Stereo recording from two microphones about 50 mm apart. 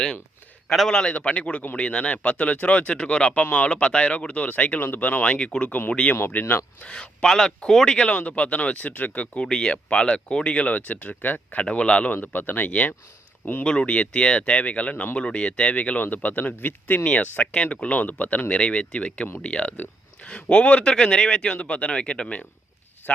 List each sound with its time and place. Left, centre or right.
0.9 s speech: centre
3.4 s speech: left
5.4 s speech: centre
6.3 s speech: left
6.8 s speech: centre
9.5 s speech: centre
10.7 s speech: left
11.6 s speech: left
12.1 s speech: left
13.7 s speech: left
23.0 s speech: left